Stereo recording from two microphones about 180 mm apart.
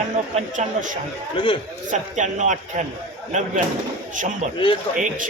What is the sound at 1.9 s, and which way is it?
Speech, 40° right (ahead or behind).